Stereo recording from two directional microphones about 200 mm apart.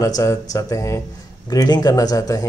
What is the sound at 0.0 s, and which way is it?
A man's voice, 15° left (ahead or behind).